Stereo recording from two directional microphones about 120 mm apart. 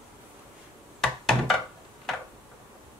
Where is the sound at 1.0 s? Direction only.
5° left (ahead or behind).